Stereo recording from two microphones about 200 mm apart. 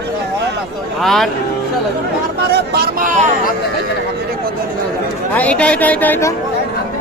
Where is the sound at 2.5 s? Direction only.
55° right (ahead or behind).